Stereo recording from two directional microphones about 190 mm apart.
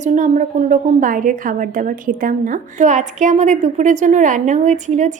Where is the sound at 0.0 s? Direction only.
40° right (ahead or behind).